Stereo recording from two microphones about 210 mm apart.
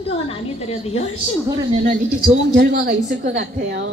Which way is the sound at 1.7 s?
40° right (ahead or behind).